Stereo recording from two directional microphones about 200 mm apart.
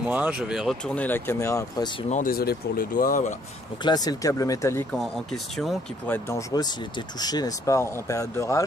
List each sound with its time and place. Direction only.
0.1 s speech: 5° right (ahead or behind); by 2.0 s 20° left (ahead or behind)
2.0 s speech: 40° left (ahead or behind)
3.8 s speech: 20° left (ahead or behind)
4.9 s speech: centre (ahead or behind)